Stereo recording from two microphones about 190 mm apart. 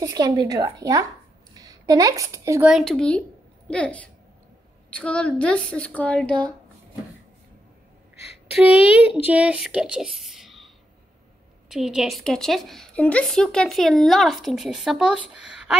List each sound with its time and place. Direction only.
0.0 s a woman's voice: 20° right (ahead or behind)
2.7 s a woman's voice: 5° left (ahead or behind)
9.1 s speech: 5° right (ahead or behind)
11.7 s a woman's voice: centre (ahead or behind)